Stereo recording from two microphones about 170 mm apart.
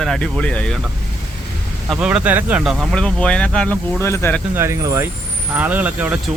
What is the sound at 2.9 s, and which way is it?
Speech, 5° left (ahead or behind).